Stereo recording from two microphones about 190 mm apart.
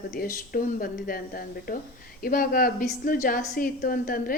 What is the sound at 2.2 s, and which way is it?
A woman's voice, 50° left (ahead or behind).